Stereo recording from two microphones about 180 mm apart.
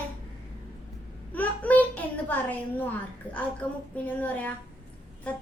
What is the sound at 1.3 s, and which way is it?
A child's voice, 10° left (ahead or behind).